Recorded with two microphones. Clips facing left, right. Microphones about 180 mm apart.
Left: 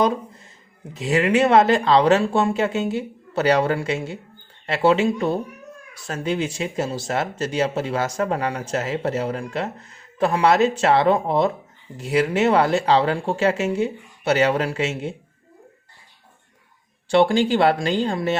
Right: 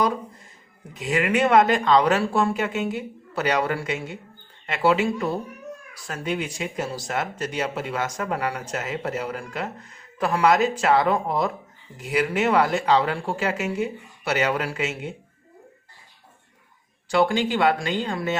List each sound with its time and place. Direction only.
0.9 s speech: 30° left (ahead or behind)
17.1 s speech: 30° left (ahead or behind)